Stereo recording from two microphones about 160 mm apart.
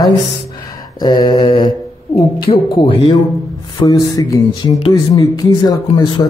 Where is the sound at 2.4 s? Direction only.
30° left (ahead or behind).